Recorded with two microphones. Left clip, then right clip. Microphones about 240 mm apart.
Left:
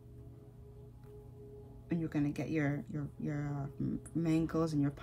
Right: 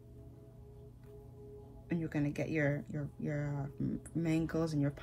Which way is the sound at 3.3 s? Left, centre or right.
Centre.